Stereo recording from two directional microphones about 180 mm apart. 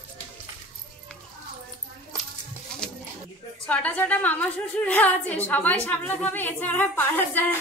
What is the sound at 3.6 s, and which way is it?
A woman's voice, 10° left (ahead or behind).